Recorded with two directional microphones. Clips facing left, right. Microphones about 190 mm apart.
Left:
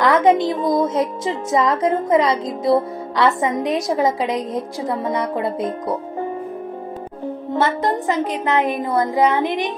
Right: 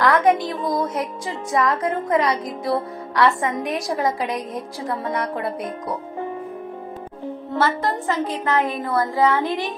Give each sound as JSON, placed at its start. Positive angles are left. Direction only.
{"t": 0.0, "sound": "a woman's voice", "side_deg": 20}
{"t": 7.5, "sound": "a woman's voice", "side_deg": 20}